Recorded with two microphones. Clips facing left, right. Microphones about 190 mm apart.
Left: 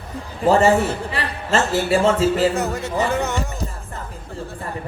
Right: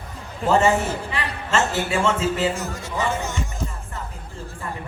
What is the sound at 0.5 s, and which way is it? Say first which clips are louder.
A man's voice: left 2 dB; 35° left (ahead or behind).